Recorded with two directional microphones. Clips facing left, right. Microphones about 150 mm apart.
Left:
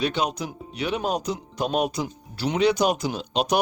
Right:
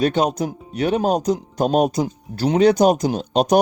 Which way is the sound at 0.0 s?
45° right (ahead or behind).